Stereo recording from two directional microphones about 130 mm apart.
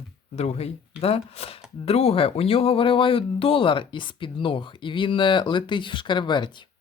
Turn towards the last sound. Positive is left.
turn(degrees=35)  # may be behind; listen again after turning